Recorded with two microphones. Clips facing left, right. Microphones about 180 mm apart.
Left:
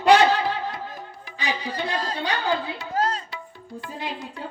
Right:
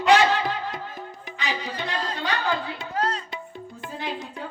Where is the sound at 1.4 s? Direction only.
35° left (ahead or behind).